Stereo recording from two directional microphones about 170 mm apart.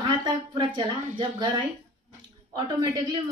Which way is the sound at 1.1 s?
30° right (ahead or behind).